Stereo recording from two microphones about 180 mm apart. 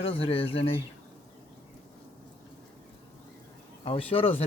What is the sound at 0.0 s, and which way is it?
Speech, 30° left (ahead or behind).